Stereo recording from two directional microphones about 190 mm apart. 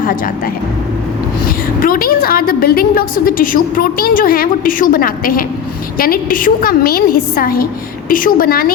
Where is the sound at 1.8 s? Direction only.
50° left (ahead or behind).